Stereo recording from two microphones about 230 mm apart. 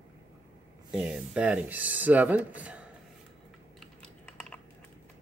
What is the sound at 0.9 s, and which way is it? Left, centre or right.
Speech, centre.